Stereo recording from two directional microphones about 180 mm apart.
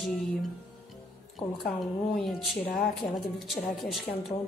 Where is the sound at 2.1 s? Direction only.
Centre (ahead or behind).